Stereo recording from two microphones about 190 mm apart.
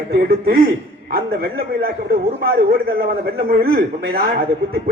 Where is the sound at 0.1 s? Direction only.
55° right (ahead or behind).